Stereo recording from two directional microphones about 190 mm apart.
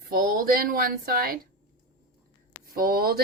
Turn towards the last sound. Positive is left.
turn(degrees=-50)  # may be behind; listen again after turning